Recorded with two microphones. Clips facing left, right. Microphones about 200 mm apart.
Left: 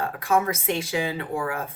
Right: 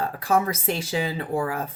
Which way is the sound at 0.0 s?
35° right (ahead or behind).